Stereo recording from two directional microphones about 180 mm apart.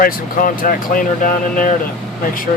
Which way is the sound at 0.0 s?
50° left (ahead or behind).